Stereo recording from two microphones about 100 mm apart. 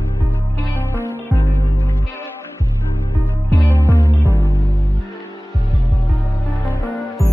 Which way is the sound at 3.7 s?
25° left (ahead or behind).